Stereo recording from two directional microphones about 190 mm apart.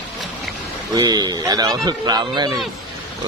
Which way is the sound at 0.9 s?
20° right (ahead or behind).